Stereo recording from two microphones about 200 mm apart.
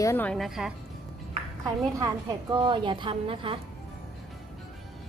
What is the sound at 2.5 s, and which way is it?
Speech, 25° right (ahead or behind).